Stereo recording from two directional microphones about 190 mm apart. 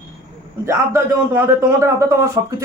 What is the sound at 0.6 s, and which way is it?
A man's voice, 15° right (ahead or behind).